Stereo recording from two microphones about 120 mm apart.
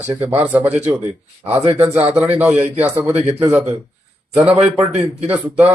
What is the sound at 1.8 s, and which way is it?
A man's voice, 25° right (ahead or behind).